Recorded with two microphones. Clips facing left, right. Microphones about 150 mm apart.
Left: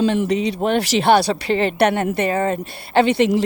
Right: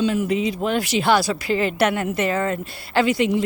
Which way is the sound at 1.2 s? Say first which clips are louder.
Left 3 dB; 30° left (ahead or behind).